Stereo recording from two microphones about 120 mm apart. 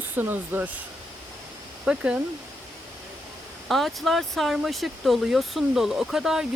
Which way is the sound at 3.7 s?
Centre (ahead or behind).